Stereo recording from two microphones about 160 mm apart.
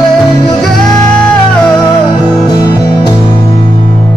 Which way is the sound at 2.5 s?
25° left (ahead or behind).